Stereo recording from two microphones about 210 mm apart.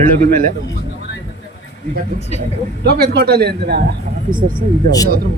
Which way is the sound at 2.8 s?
50° right (ahead or behind).